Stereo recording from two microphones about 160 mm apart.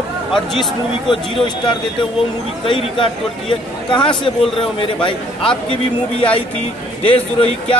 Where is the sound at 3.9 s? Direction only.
30° left (ahead or behind).